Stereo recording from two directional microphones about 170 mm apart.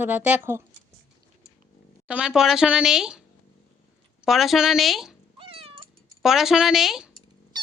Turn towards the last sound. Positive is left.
turn(degrees=0)  # may be behind; listen again after turning